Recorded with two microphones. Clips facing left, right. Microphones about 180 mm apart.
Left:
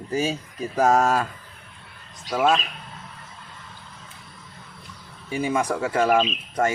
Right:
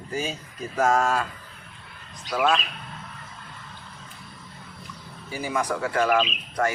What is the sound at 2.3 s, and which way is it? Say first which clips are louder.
Speech: left 2 dB; 25° left (ahead or behind).